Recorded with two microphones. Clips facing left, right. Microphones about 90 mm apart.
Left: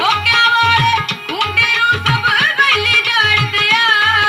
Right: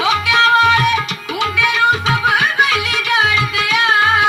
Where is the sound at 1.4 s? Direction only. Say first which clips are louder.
Right 1 dB; 65° left (ahead or behind).